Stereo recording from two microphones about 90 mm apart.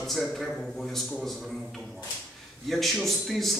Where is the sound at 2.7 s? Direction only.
Centre (ahead or behind).